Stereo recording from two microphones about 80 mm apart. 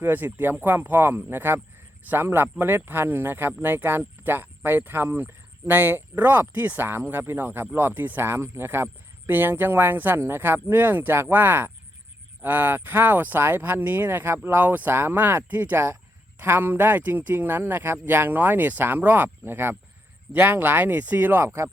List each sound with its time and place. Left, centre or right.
0.0 s speech: right